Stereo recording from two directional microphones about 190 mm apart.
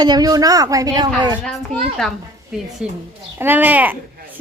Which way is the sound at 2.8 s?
5° right (ahead or behind).